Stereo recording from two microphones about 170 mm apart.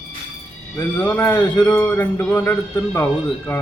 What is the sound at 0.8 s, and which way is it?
Speech, 15° left (ahead or behind).